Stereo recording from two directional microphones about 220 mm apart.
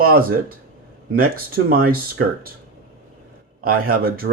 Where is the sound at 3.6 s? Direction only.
40° right (ahead or behind).